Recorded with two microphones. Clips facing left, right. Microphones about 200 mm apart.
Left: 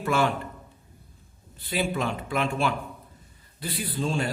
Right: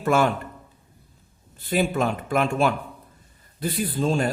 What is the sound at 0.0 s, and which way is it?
Speech, 45° right (ahead or behind).